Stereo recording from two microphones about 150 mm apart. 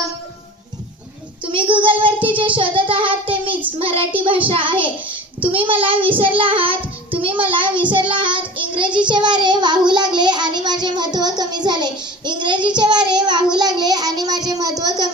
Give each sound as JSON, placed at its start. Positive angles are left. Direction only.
{"t": 1.5, "sound": "child singing", "side_deg": -35}